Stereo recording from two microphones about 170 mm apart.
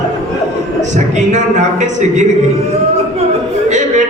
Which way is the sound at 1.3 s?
45° right (ahead or behind).